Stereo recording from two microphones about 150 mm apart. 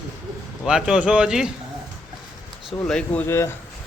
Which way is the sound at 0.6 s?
5° right (ahead or behind).